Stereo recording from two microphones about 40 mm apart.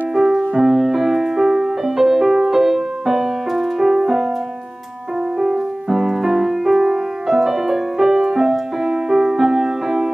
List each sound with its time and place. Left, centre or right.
0.1 s music: centre
5.4 s music: centre